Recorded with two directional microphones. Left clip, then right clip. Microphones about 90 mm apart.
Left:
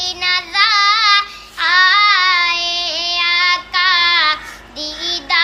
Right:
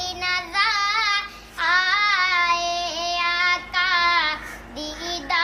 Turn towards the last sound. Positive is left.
turn(degrees=-40)  # may be behind; listen again after turning